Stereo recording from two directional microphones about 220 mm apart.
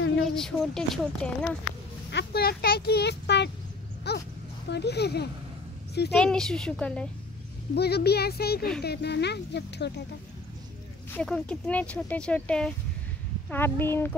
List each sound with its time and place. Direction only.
0.3 s speech: centre (ahead or behind)
2.0 s speech: 50° left (ahead or behind)
6.1 s speech: 5° left (ahead or behind)
7.7 s speech: 45° left (ahead or behind)
11.1 s a woman's voice: 5° left (ahead or behind)